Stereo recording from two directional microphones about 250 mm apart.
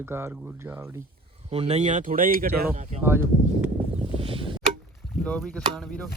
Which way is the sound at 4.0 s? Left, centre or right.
Right.